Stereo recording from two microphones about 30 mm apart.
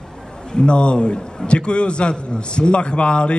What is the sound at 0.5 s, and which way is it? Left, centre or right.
A man's voice, left.